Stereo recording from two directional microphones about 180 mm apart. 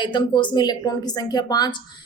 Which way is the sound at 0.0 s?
25° left (ahead or behind).